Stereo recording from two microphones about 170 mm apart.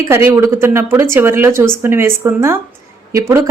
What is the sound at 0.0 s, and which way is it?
Speech, 15° right (ahead or behind).